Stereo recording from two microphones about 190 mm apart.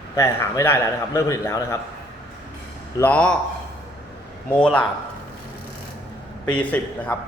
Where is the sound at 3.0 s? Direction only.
10° left (ahead or behind).